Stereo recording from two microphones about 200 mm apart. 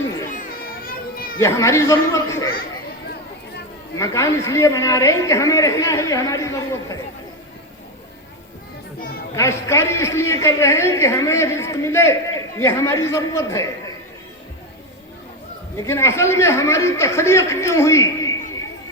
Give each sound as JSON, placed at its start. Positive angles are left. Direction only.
{"t": 0.9, "sound": "children playing", "side_deg": 45}
{"t": 1.4, "sound": "a man's voice", "side_deg": 15}
{"t": 3.9, "sound": "a man's voice", "side_deg": 15}
{"t": 9.3, "sound": "a man's voice", "side_deg": 15}
{"t": 15.8, "sound": "a man's voice", "side_deg": 15}